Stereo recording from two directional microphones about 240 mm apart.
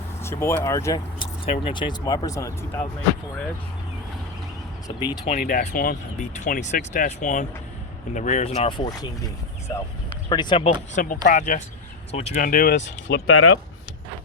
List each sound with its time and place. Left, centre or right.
0.2 s speech: centre
5.1 s speech: left
10.2 s speech: centre
10.9 s speech: left
13.1 s speech: left